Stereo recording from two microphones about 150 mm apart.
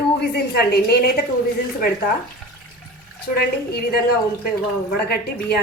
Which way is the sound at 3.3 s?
90° left.